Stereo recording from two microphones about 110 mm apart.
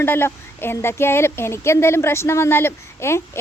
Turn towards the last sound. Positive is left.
turn(degrees=25)  # may be behind; listen again after turning